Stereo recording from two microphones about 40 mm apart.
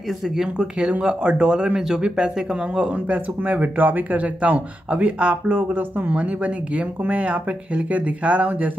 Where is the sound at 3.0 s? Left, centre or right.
Right.